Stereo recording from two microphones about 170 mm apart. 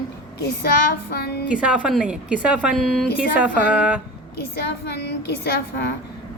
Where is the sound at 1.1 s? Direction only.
70° left (ahead or behind).